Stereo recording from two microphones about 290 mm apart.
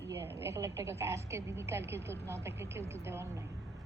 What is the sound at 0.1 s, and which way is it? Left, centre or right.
A woman's voice, centre.